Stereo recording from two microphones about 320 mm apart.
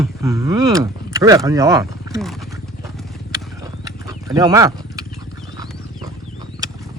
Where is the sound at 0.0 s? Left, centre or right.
Centre.